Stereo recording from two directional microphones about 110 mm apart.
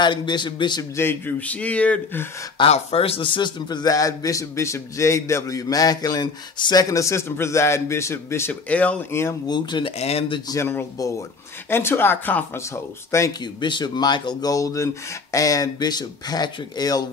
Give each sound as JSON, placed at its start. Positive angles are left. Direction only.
{"t": 0.0, "sound": "a man's voice", "side_deg": 45}
{"t": 0.9, "sound": "speech", "side_deg": 20}
{"t": 2.7, "sound": "a man's voice", "side_deg": 65}
{"t": 8.6, "sound": "speech", "side_deg": 15}
{"t": 9.5, "sound": "a man's voice", "side_deg": 45}
{"t": 9.9, "sound": "speech", "side_deg": 70}
{"t": 10.5, "sound": "speech", "side_deg": 20}
{"t": 13.4, "sound": "a man's voice", "side_deg": 45}